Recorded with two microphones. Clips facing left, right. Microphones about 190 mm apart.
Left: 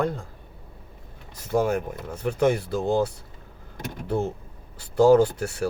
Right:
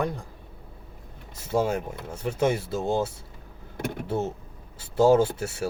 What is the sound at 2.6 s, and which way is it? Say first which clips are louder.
Speech: left 3 dB; 25° right (ahead or behind).